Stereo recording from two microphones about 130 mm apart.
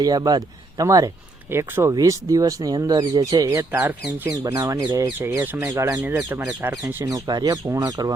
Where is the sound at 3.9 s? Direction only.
15° right (ahead or behind).